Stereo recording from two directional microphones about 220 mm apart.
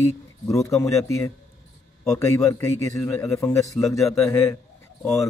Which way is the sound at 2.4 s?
15° left (ahead or behind).